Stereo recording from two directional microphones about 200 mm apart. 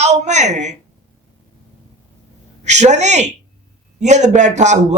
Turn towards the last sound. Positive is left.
turn(degrees=-35)  # may be behind; listen again after turning